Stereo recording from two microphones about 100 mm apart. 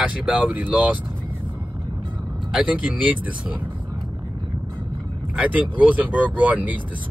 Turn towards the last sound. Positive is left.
turn(degrees=-15)  # may be behind; listen again after turning